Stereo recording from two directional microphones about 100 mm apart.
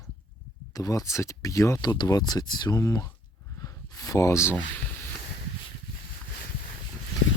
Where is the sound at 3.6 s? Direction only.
35° left (ahead or behind).